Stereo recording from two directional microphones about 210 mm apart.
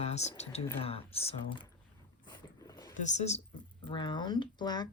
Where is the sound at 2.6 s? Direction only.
15° left (ahead or behind).